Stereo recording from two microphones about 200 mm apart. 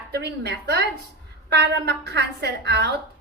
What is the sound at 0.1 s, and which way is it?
A woman's voice, 55° right (ahead or behind).